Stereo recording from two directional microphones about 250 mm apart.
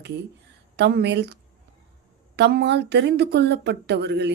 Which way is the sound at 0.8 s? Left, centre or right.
Right.